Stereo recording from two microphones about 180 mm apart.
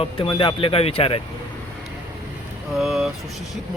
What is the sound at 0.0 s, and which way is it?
Speech, 30° left (ahead or behind).